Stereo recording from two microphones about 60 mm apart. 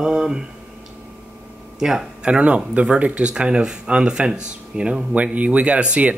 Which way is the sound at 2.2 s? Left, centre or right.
Centre.